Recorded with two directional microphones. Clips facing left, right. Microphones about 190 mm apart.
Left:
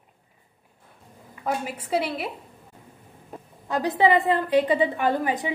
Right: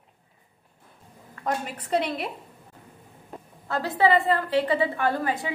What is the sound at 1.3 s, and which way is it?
A woman's voice, 5° left (ahead or behind).